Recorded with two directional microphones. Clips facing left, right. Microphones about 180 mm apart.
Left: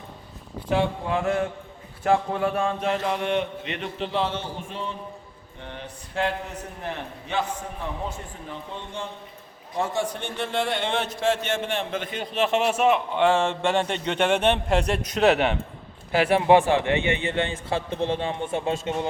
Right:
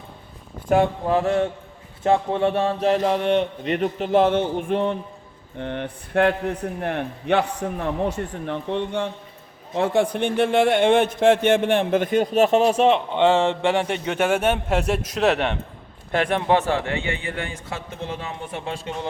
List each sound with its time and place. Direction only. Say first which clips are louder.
0.7 s a man's voice: right 5 dB; 45° right (ahead or behind); by 18.9 s 25° left (ahead or behind)